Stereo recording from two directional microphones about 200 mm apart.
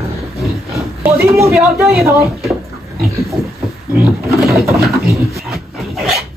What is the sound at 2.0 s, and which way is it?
Speech, 15° right (ahead or behind).